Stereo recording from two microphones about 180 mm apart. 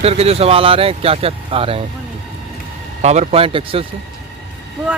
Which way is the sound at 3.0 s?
35° right (ahead or behind).